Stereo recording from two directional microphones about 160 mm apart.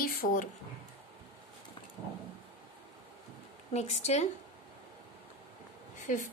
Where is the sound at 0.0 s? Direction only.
65° left (ahead or behind).